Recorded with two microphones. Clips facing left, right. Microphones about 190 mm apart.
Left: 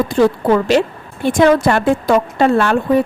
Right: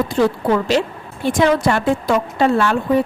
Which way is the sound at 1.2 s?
50° left (ahead or behind).